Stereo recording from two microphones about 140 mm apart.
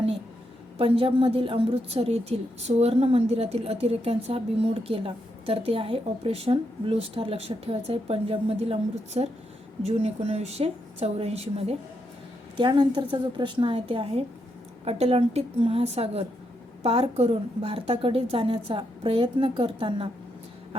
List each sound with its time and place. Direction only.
0.8 s a woman's voice: 40° right (ahead or behind)
12.5 s a woman's voice: 35° right (ahead or behind)